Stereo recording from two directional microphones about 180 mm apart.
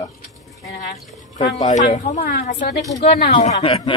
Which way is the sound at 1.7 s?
40° left (ahead or behind).